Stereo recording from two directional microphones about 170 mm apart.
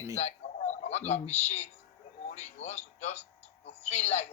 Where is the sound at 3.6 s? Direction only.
40° left (ahead or behind).